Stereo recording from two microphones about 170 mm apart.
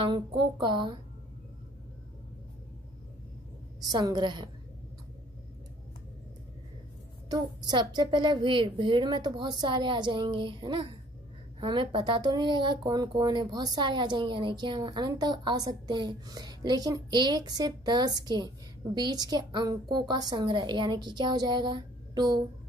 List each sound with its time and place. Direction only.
0.0 s speech: 30° right (ahead or behind)
3.8 s speech: 25° right (ahead or behind)
7.2 s speech: 25° right (ahead or behind)